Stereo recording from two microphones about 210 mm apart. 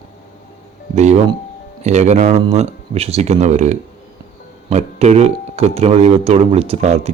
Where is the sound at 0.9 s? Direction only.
35° right (ahead or behind).